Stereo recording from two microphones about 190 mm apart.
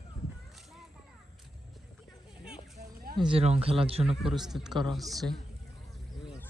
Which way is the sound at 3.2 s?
25° right (ahead or behind).